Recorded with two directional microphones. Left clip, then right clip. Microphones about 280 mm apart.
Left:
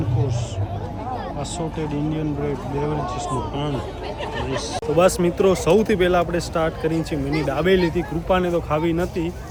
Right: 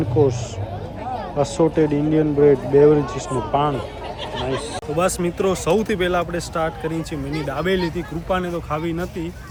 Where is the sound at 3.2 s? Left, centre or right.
Centre.